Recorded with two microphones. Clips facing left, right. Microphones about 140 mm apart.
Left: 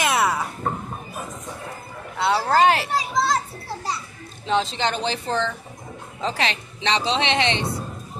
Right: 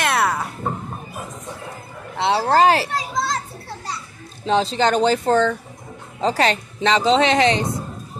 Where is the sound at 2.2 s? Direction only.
30° right (ahead or behind).